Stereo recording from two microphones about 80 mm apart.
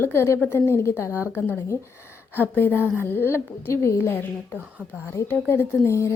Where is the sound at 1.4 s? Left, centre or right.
Left.